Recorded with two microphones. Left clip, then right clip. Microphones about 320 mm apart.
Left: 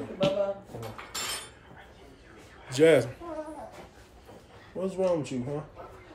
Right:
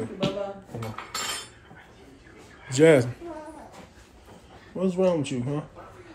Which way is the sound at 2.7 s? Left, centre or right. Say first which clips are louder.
Right 3 dB; centre.